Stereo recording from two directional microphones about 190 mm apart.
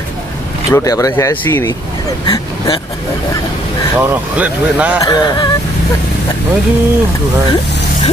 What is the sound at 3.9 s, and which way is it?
Speech, 10° right (ahead or behind).